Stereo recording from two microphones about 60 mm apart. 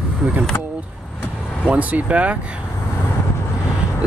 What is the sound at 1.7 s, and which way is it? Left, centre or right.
Speech, right.